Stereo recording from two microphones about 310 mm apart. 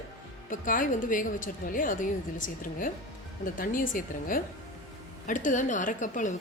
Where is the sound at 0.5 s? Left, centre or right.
Left.